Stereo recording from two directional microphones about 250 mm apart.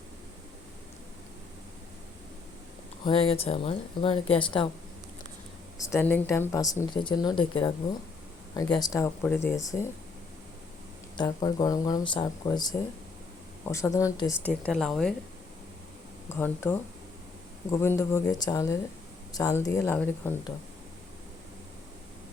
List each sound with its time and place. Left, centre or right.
3.0 s speech: left
5.8 s speech: centre
11.2 s speech: centre
16.3 s speech: centre